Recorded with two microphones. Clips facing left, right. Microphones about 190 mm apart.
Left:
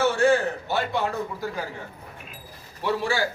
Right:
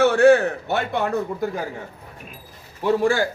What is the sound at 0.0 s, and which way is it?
A man's voice, 65° right (ahead or behind).